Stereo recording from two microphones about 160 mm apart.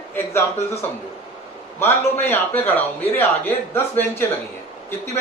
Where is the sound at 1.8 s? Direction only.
15° left (ahead or behind).